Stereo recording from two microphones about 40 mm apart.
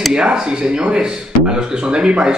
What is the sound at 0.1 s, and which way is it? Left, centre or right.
Speech, centre.